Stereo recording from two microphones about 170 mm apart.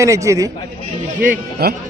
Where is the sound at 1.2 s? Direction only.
60° right (ahead or behind).